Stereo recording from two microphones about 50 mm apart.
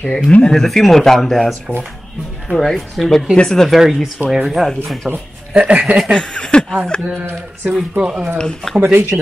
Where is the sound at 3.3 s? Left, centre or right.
Centre.